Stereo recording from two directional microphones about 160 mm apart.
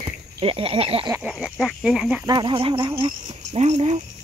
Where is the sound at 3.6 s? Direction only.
45° right (ahead or behind).